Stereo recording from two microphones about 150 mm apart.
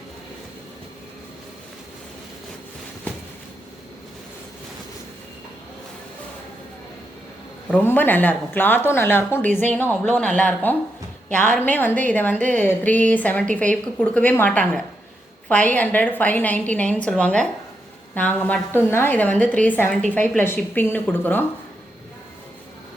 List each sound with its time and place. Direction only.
7.7 s a woman's voice: 15° left (ahead or behind)
12.4 s a woman's voice: 55° right (ahead or behind)
12.6 s a woman's voice: 10° left (ahead or behind)